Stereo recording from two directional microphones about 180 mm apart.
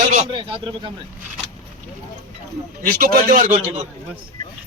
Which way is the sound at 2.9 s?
50° right (ahead or behind).